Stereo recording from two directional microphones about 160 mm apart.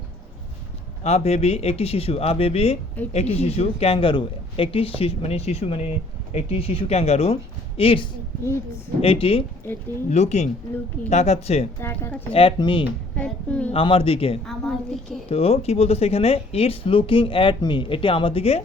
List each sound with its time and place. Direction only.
1.0 s speech: 45° left (ahead or behind)
11.8 s a woman's voice: 15° left (ahead or behind)
12.3 s speech: 35° left (ahead or behind)
13.1 s a woman's voice: 10° left (ahead or behind)
13.7 s speech: 35° left (ahead or behind)
14.4 s a woman's voice: 5° left (ahead or behind)
15.3 s speech: 40° left (ahead or behind)